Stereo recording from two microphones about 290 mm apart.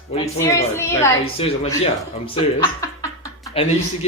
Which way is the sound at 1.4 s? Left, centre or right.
Centre.